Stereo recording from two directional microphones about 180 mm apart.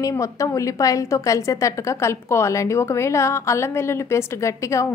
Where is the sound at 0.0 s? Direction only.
20° left (ahead or behind).